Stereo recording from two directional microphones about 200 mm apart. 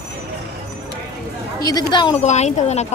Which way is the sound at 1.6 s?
20° left (ahead or behind).